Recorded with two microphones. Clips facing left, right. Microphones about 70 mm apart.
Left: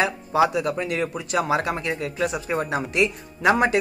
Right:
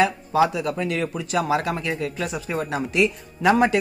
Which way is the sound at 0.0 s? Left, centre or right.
Left.